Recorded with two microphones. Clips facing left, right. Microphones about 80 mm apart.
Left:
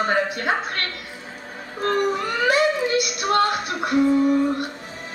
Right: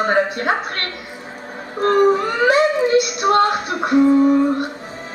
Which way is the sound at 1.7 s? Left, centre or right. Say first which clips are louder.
Right 7 dB; right.